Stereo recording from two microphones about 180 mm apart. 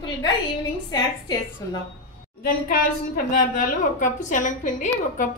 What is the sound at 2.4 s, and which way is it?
A woman's voice, 55° left (ahead or behind).